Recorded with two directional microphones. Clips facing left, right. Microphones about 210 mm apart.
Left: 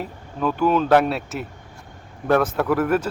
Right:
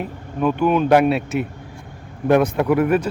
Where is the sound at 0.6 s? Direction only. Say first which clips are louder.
Right 2 dB; 15° right (ahead or behind).